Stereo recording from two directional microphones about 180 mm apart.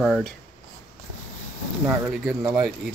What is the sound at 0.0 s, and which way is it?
Speech, centre (ahead or behind).